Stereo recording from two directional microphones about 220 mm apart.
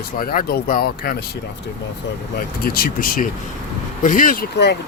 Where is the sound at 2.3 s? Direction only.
45° left (ahead or behind).